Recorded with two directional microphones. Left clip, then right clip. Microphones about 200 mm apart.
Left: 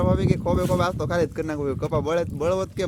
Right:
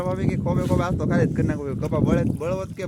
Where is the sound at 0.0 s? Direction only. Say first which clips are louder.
Left 3 dB; 30° left (ahead or behind).